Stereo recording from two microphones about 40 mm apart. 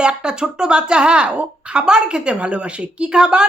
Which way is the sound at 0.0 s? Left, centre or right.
Right.